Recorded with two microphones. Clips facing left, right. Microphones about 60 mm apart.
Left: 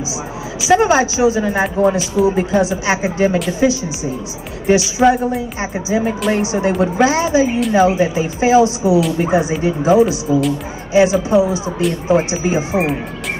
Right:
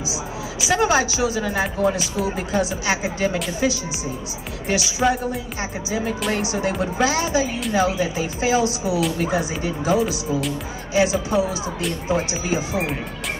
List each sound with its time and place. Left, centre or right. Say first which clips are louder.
0.7 s a woman's voice: left 6 dB; left